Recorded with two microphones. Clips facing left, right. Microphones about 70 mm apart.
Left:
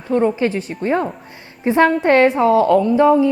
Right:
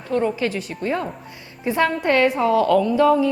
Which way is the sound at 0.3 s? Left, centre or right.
Left.